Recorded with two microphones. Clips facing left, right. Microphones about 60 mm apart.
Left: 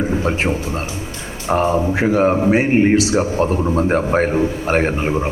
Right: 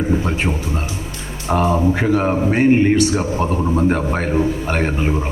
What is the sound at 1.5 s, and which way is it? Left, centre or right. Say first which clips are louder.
Speech: even; left.